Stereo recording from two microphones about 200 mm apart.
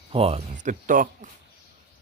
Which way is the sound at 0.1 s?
30° right (ahead or behind).